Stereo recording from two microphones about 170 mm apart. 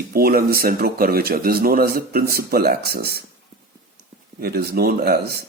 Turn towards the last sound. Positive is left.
turn(degrees=-70)  # may be behind; listen again after turning